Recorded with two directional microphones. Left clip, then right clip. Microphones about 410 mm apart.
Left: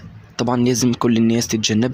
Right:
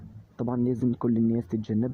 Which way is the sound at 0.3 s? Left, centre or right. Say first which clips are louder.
Left 10 dB; right.